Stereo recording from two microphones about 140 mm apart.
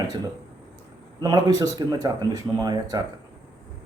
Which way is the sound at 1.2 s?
25° right (ahead or behind).